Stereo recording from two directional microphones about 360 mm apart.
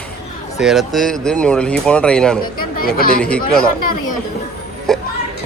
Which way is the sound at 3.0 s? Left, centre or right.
Left.